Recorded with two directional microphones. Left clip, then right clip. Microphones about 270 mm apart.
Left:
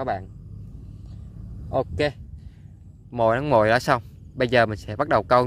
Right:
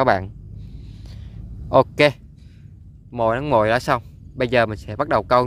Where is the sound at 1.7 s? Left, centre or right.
Centre.